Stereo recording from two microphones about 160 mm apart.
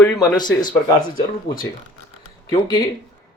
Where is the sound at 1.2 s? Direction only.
65° left (ahead or behind).